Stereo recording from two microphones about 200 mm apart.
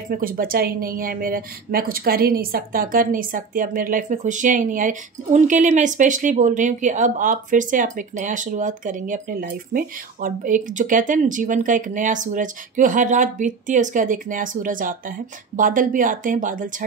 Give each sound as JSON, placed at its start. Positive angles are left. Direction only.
{"t": 0.1, "sound": "speech", "side_deg": -45}